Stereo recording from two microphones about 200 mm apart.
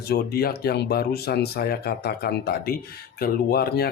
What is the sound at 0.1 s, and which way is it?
Speech, 50° left (ahead or behind).